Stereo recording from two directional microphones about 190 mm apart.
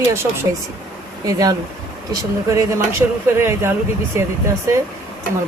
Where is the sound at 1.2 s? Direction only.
20° right (ahead or behind).